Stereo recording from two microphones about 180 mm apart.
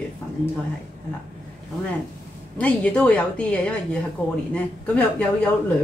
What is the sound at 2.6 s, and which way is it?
Speech, 5° left (ahead or behind).